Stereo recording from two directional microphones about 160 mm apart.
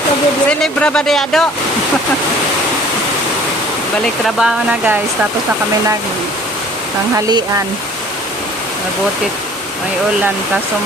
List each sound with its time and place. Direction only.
0.4 s speech: 5° left (ahead or behind)
4.0 s speech: 5° right (ahead or behind)